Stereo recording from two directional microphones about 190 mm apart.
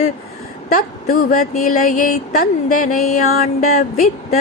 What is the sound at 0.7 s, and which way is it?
Music, 45° left (ahead or behind).